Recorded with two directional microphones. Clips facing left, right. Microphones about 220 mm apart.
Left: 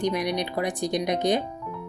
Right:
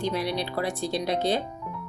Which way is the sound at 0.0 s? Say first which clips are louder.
Left 2 dB; 15° left (ahead or behind).